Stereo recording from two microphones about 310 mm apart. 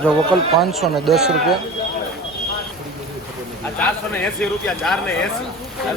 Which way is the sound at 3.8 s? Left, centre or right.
Centre.